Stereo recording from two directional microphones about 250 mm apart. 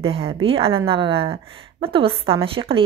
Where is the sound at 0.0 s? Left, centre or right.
Right.